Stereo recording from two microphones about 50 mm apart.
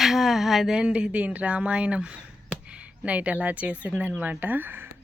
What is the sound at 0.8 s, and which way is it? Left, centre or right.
Speech, centre.